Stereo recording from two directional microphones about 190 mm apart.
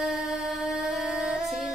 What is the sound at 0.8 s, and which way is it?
Music, centre (ahead or behind).